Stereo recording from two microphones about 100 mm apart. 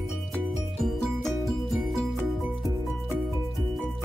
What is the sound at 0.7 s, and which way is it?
Music, centre (ahead or behind).